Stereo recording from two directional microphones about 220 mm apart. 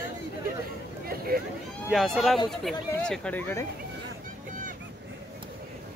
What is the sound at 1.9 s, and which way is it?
Speech, centre (ahead or behind).